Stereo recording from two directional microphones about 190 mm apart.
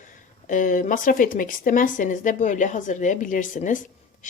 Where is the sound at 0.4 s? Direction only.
45° left (ahead or behind).